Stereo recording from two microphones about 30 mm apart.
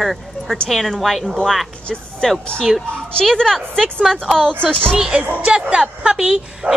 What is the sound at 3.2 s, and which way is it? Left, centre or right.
Speech, left.